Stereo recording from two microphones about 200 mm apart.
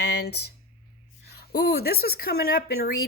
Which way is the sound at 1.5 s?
50° left (ahead or behind).